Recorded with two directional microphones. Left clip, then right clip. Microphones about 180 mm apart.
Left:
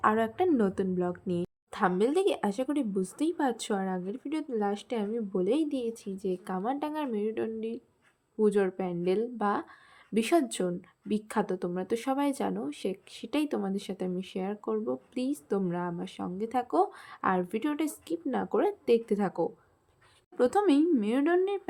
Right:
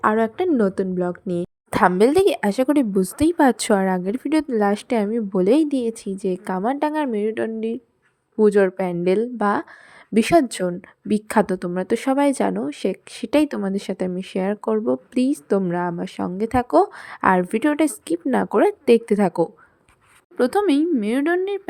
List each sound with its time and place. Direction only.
0.0 s a woman's voice: 35° right (ahead or behind)
1.7 s a woman's voice: 60° right (ahead or behind)
20.3 s a woman's voice: 30° right (ahead or behind)